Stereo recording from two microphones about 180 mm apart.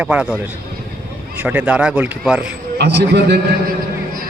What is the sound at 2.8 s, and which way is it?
Speech, 65° right (ahead or behind).